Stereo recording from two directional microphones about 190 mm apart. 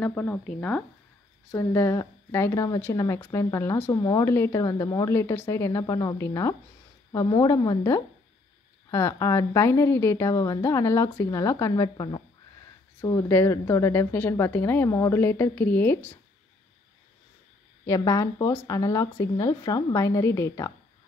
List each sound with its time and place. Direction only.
0.0 s a woman's voice: 5° left (ahead or behind)
17.8 s a woman's voice: 15° left (ahead or behind)